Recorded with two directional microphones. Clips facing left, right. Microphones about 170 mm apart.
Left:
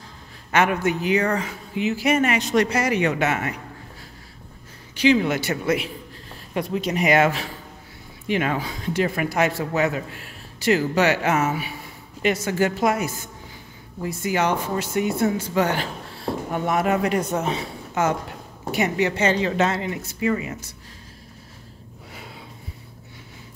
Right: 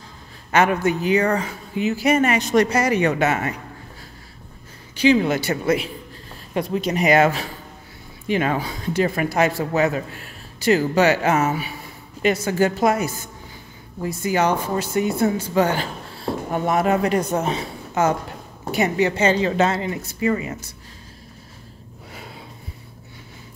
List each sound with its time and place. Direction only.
0.5 s speech: 35° right (ahead or behind)
5.1 s speech: 35° right (ahead or behind)